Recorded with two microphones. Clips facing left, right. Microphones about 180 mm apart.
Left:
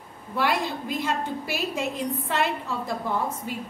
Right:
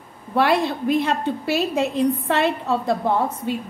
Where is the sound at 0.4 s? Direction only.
70° right (ahead or behind).